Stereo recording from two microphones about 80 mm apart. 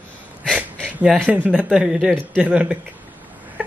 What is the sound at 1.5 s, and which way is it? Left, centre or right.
Speech, centre.